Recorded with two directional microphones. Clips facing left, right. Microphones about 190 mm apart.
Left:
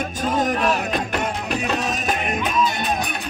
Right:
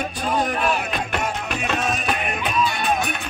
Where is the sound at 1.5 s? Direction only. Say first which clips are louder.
Left 1 dB; 35° left (ahead or behind).